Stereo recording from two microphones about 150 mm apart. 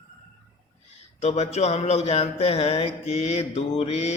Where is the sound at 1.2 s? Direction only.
45° left (ahead or behind).